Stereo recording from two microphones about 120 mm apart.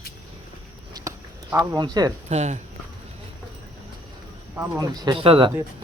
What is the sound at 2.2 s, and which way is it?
Speech, 75° right (ahead or behind).